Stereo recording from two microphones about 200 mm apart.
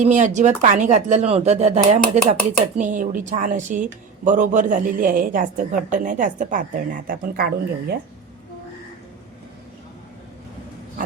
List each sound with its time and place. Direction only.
0.0 s speech: 35° right (ahead or behind)